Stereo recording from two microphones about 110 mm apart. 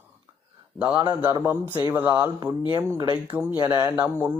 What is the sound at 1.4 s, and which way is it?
Speech, 20° right (ahead or behind).